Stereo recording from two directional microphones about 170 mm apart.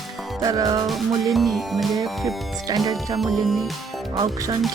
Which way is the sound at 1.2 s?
Centre (ahead or behind).